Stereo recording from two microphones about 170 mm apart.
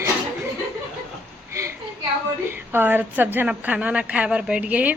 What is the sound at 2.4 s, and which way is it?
A woman's voice, 10° right (ahead or behind).